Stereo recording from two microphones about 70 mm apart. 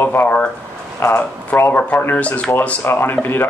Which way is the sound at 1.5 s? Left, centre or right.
Left.